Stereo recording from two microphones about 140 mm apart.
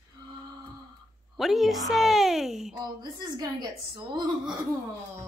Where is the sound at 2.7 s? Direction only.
30° right (ahead or behind).